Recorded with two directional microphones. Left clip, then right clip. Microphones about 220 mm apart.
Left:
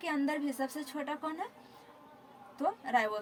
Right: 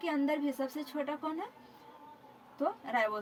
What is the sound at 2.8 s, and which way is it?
Speech, 20° left (ahead or behind).